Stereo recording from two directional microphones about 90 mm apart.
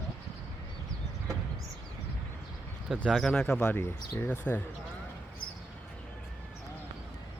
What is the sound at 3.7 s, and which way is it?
Speech, 25° left (ahead or behind).